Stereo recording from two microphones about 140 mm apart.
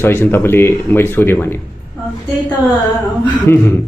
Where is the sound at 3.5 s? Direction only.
15° left (ahead or behind).